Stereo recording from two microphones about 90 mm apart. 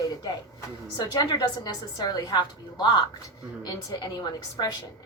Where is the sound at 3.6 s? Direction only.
40° left (ahead or behind).